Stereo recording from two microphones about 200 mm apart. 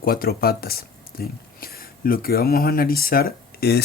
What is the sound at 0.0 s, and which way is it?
Speech, 45° left (ahead or behind).